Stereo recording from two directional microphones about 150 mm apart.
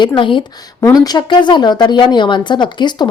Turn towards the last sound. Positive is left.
turn(degrees=30)  # may be behind; listen again after turning